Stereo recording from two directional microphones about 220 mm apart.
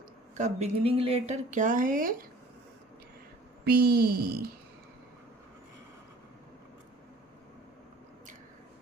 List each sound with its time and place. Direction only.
0.3 s speech: 30° right (ahead or behind)
3.6 s speech: 45° right (ahead or behind)